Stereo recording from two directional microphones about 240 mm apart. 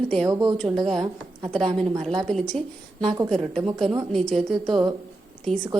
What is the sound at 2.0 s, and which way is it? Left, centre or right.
A woman's voice, centre.